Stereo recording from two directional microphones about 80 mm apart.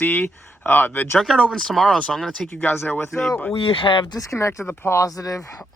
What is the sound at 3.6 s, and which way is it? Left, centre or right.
Speech, left.